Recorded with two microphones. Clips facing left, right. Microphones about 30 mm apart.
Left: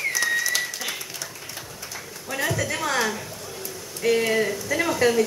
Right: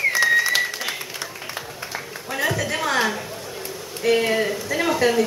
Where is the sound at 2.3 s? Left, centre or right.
Centre.